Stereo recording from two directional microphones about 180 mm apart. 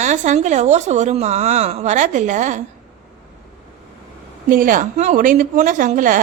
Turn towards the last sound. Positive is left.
turn(degrees=-45)  # may be behind; listen again after turning